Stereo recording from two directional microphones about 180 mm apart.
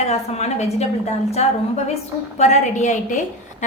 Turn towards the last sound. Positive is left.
turn(degrees=40)  # may be behind; listen again after turning